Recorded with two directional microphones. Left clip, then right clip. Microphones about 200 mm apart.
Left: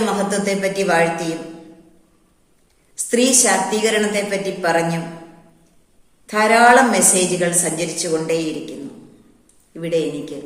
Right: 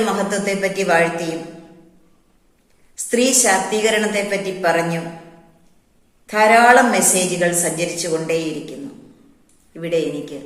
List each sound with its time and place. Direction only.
0.0 s a woman's voice: 5° left (ahead or behind)
2.9 s a woman's voice: 10° left (ahead or behind)
6.2 s a woman's voice: 5° left (ahead or behind)
9.7 s a woman's voice: 10° left (ahead or behind)